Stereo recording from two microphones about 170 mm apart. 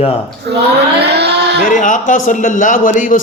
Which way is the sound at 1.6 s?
50° left (ahead or behind).